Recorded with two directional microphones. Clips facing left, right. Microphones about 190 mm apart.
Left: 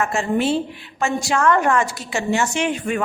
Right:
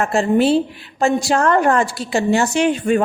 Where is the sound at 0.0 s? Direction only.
35° right (ahead or behind).